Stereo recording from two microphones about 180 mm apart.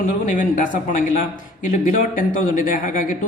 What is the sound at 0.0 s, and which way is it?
Speech, 45° left (ahead or behind).